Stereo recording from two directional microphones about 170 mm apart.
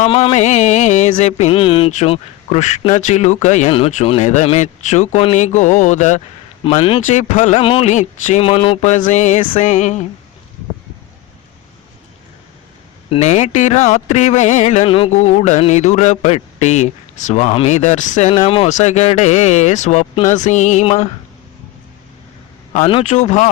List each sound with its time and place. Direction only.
0.1 s speech: 35° left (ahead or behind)
6.7 s speech: 30° left (ahead or behind)
13.1 s speech: 45° left (ahead or behind)
22.7 s speech: 35° left (ahead or behind)
23.0 s speech: 45° left (ahead or behind)